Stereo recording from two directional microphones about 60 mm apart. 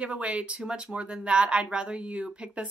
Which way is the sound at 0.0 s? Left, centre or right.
Right.